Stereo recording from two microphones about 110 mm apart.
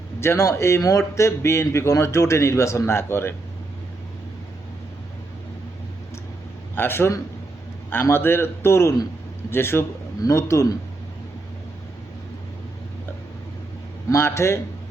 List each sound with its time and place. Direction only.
0.2 s speech: 25° left (ahead or behind)
6.7 s speech: 20° left (ahead or behind)
14.1 s speech: 25° left (ahead or behind)